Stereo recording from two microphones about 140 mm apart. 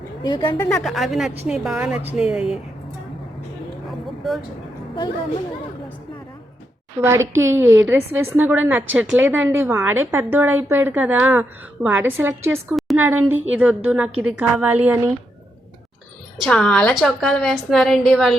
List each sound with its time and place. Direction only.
0.2 s a woman's voice: 30° left (ahead or behind)
0.7 s a woman's voice: centre (ahead or behind)
7.0 s a woman's voice: 20° right (ahead or behind)
16.4 s a woman's voice: 5° left (ahead or behind)